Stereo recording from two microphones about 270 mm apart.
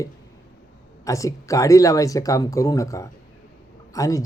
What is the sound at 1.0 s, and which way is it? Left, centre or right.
Speech, centre.